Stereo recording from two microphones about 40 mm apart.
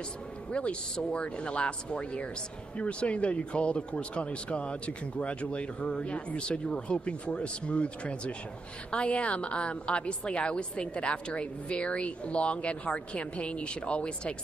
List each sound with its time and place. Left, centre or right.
0.5 s speech: left